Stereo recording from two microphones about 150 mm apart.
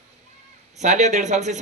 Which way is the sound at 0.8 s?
50° right (ahead or behind).